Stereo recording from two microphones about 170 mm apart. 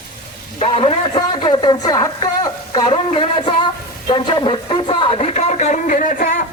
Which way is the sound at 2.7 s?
30° left (ahead or behind).